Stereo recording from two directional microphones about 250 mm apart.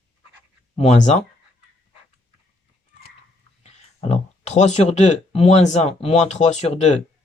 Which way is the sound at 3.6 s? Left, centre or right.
Left.